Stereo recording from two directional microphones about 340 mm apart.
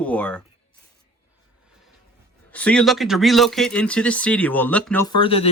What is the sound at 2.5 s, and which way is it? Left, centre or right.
Speech, centre.